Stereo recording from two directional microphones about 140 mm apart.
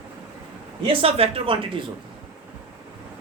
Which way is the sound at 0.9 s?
40° right (ahead or behind).